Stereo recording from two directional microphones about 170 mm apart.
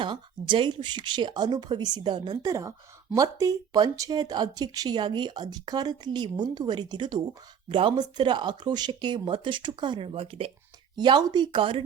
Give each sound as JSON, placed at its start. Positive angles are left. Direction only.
{"t": 0.0, "sound": "speech", "side_deg": -30}